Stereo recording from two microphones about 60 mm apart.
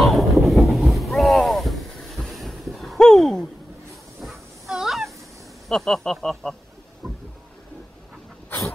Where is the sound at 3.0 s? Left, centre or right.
Centre.